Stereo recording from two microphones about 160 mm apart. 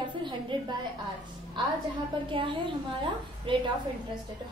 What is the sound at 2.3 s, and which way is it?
A woman's voice, 30° right (ahead or behind).